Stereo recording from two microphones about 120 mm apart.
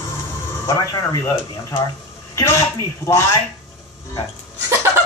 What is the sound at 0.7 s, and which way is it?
A woman's voice, 25° left (ahead or behind).